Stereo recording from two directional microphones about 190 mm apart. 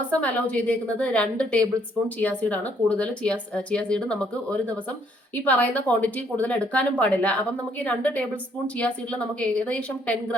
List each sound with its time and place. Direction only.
0.1 s a woman's voice: 10° left (ahead or behind)